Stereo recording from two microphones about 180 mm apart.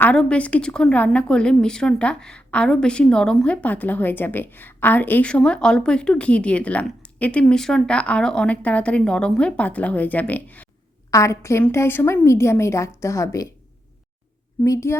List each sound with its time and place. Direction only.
0.0 s a woman's voice: 5° left (ahead or behind)
14.6 s a woman's voice: 15° left (ahead or behind)